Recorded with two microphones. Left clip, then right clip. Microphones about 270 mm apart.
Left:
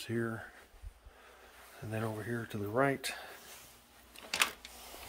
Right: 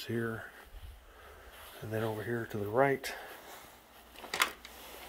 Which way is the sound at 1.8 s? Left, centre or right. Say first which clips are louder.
Right 3 dB; centre.